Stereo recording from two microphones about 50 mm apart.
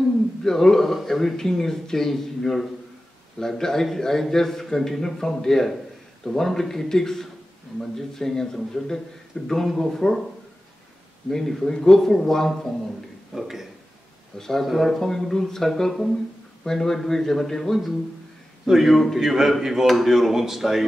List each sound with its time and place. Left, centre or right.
0.4 s a man's voice: centre
9.3 s a man's voice: left
9.8 s a man's voice: centre
11.2 s a man's voice: centre
13.3 s speech: centre
14.4 s a man's voice: centre